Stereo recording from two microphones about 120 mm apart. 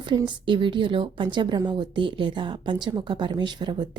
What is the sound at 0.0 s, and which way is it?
A woman's voice, 40° right (ahead or behind).